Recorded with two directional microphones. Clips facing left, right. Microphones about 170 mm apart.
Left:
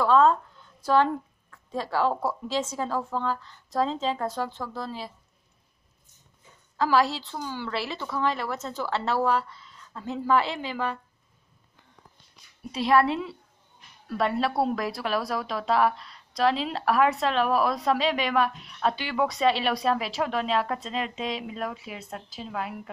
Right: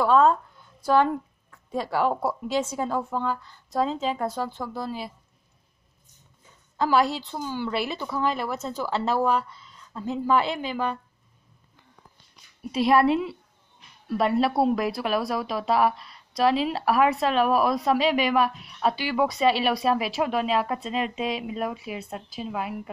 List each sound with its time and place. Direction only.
0.0 s speech: 10° right (ahead or behind)
6.8 s speech: 15° right (ahead or behind)
12.7 s speech: 10° right (ahead or behind)